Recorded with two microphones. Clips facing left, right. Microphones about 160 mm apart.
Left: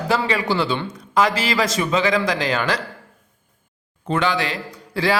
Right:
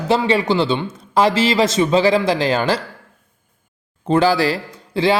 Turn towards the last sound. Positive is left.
turn(degrees=-25)  # may be behind; listen again after turning